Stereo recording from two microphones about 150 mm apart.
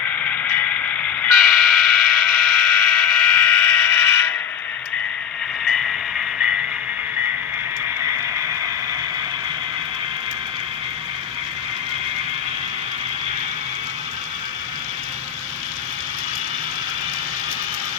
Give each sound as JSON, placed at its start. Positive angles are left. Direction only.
{"t": 0.0, "sound": "vehicle", "side_deg": 10}
{"t": 5.6, "sound": "music", "side_deg": 0}